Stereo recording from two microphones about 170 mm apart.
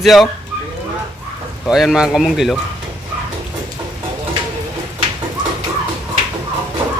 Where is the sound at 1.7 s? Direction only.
Centre (ahead or behind).